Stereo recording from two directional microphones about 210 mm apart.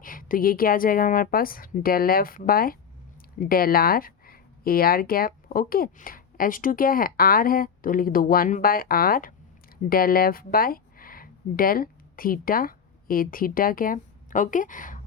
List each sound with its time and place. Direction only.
0.0 s speech: 40° left (ahead or behind)